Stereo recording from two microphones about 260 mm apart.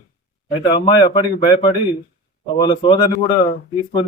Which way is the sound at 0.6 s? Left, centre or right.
Centre.